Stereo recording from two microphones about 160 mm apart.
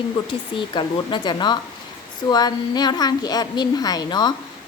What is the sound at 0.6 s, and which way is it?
A woman's voice, 30° left (ahead or behind).